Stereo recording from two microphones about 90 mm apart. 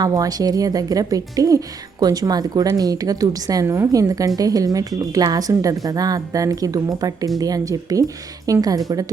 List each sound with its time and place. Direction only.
0.0 s a woman's voice: 45° right (ahead or behind)